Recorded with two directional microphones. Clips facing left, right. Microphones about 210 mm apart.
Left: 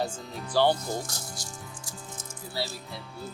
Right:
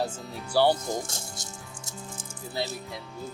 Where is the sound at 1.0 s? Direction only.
25° right (ahead or behind).